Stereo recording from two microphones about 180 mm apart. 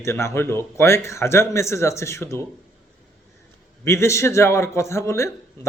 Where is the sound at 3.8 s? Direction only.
15° left (ahead or behind).